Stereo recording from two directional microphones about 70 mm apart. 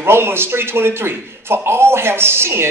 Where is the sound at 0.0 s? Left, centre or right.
Right.